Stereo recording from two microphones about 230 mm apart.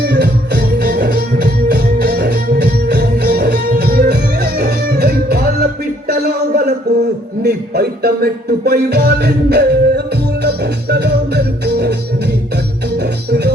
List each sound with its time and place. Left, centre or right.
0.0 s music: right
6.1 s a sound: right
7.4 s music: right